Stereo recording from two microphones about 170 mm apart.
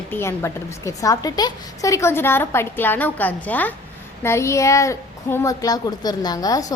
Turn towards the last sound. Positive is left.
turn(degrees=20)  # may be behind; listen again after turning